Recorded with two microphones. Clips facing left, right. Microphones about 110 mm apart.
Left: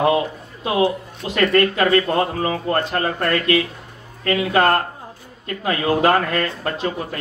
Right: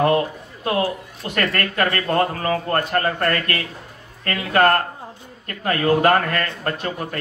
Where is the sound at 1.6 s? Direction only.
45° right (ahead or behind).